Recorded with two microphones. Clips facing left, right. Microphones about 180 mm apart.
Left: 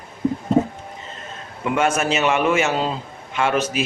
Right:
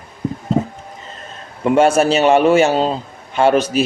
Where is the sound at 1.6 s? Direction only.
35° right (ahead or behind).